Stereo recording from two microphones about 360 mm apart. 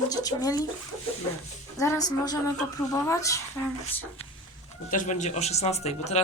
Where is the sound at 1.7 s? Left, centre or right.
Centre.